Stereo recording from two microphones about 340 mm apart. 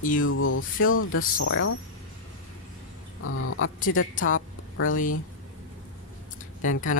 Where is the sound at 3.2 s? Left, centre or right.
Left.